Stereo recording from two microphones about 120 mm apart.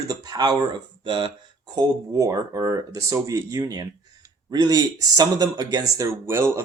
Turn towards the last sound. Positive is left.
turn(degrees=-20)  # may be behind; listen again after turning